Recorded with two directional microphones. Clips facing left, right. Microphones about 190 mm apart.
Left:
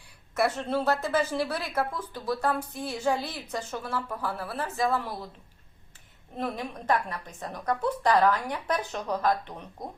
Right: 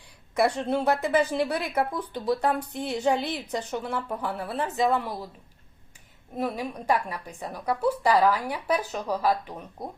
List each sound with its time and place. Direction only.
0.3 s a woman's voice: 15° right (ahead or behind)
6.3 s a woman's voice: 10° right (ahead or behind)